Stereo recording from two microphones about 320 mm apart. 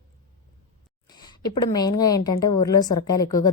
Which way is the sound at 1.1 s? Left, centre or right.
Centre.